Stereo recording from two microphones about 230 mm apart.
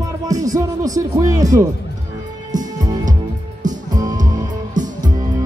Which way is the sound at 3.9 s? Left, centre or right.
Centre.